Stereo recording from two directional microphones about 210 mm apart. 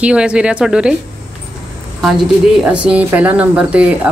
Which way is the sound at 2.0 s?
Centre (ahead or behind).